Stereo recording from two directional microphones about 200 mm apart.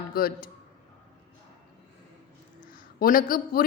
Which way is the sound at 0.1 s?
50° left (ahead or behind).